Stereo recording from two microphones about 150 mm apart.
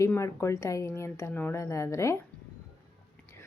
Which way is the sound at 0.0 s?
20° left (ahead or behind).